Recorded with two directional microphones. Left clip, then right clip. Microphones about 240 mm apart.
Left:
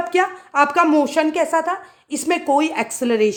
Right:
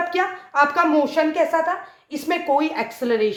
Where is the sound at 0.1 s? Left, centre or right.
Left.